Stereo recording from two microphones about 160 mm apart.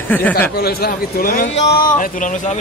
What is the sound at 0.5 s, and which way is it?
Speech, 75° left (ahead or behind).